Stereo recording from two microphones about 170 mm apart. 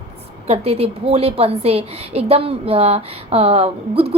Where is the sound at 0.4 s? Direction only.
35° right (ahead or behind).